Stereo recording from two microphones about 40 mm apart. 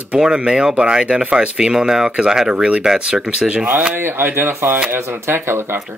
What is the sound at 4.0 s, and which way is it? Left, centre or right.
Speech, right.